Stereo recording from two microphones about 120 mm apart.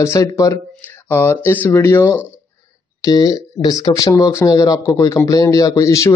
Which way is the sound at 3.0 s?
30° left (ahead or behind).